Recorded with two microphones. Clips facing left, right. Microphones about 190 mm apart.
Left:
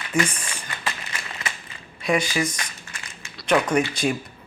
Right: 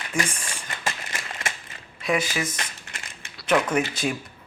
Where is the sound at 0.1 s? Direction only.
Centre (ahead or behind).